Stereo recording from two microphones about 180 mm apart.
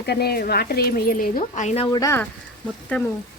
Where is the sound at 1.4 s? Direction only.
35° left (ahead or behind).